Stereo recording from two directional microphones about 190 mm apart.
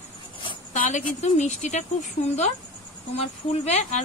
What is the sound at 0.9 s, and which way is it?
Speech, 35° left (ahead or behind).